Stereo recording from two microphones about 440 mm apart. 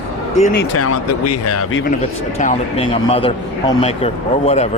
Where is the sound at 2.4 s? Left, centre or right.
Centre.